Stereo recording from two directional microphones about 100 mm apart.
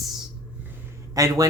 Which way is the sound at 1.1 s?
35° right (ahead or behind).